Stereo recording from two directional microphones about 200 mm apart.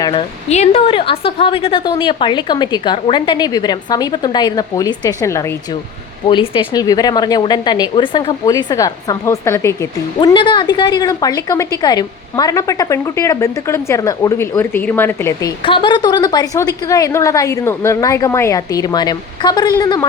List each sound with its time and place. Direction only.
0.0 s a woman's voice: 25° left (ahead or behind)
6.2 s a woman's voice: 25° left (ahead or behind)